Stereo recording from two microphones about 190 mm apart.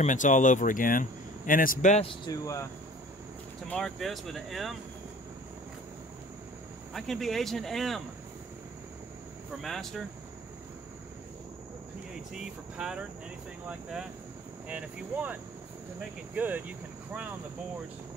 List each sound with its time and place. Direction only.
0.0 s speech: 40° left (ahead or behind)
2.2 s speech: 15° left (ahead or behind)
3.6 s speech: 5° left (ahead or behind)
6.9 s speech: centre (ahead or behind)
9.6 s speech: centre (ahead or behind)
12.4 s speech: 5° right (ahead or behind)